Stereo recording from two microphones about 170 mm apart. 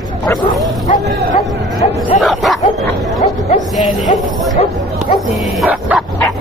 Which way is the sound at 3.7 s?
Centre (ahead or behind).